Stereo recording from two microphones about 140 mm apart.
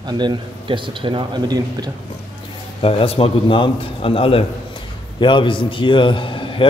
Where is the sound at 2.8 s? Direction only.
45° left (ahead or behind).